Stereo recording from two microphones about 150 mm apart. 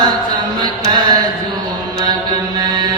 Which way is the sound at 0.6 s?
30° right (ahead or behind).